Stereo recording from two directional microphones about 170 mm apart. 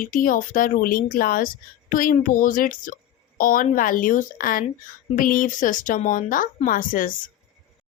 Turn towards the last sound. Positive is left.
turn(degrees=55)  # may be behind; listen again after turning